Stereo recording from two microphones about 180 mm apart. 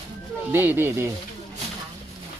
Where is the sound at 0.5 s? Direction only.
10° right (ahead or behind).